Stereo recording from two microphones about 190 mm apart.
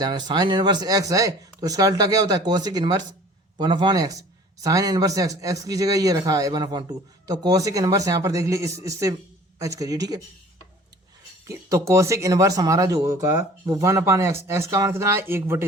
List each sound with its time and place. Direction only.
0.0 s a man's voice: 25° right (ahead or behind)
11.4 s speech: 15° right (ahead or behind)